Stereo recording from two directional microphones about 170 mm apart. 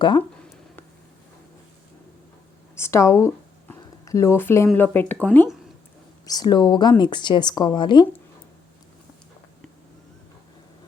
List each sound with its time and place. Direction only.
2.7 s speech: 15° left (ahead or behind)
3.7 s a sound: 15° left (ahead or behind)
4.7 s speech: 10° left (ahead or behind)
6.2 s a woman's voice: 20° left (ahead or behind)